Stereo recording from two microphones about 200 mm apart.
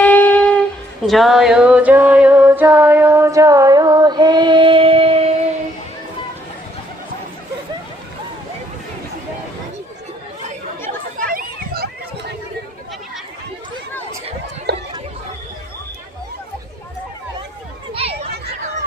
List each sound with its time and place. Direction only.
0.0 s a sound: 10° left (ahead or behind); by 5.5 s 30° right (ahead or behind)
10.8 s chatter: 45° right (ahead or behind)
14.7 s chatter: 55° right (ahead or behind)
17.9 s children playing: 30° right (ahead or behind)